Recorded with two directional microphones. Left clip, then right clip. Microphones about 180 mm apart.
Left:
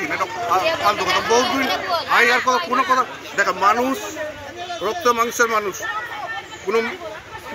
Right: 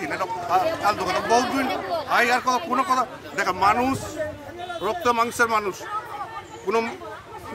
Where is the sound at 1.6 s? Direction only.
65° right (ahead or behind).